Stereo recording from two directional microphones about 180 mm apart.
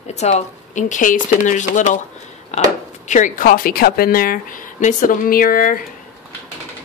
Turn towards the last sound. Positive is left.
turn(degrees=50)  # may be behind; listen again after turning